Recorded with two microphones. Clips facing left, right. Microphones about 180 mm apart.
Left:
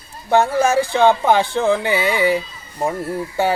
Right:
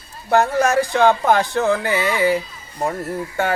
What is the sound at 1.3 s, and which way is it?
Speech, centre (ahead or behind).